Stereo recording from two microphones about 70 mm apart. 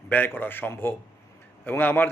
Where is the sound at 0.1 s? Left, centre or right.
Left.